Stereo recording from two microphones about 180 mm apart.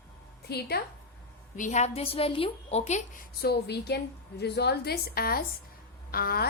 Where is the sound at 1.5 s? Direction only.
40° left (ahead or behind).